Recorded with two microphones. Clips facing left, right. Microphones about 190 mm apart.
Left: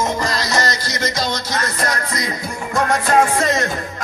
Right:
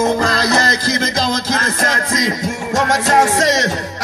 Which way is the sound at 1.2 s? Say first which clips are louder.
Right 4 dB; 90° right.